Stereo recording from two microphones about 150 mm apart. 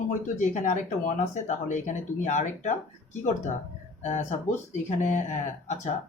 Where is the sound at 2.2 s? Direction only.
55° left (ahead or behind).